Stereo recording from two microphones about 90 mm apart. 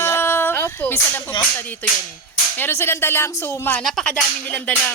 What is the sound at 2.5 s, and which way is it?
Speech, 25° left (ahead or behind).